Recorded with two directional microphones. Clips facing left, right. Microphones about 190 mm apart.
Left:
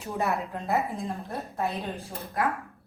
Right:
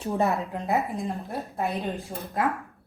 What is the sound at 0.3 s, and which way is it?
Speech, centre (ahead or behind).